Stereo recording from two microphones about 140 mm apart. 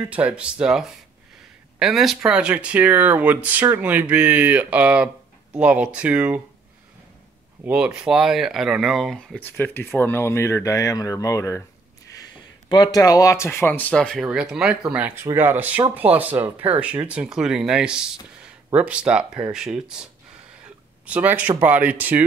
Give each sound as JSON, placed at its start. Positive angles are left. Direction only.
{"t": 0.1, "sound": "speech", "side_deg": -10}
{"t": 7.6, "sound": "speech", "side_deg": -5}
{"t": 9.4, "sound": "speech", "side_deg": 15}
{"t": 12.6, "sound": "speech", "side_deg": 30}